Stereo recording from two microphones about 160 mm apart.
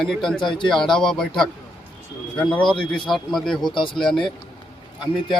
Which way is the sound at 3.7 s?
30° left (ahead or behind).